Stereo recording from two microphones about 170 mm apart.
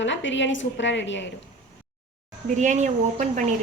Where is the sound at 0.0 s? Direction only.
90° left.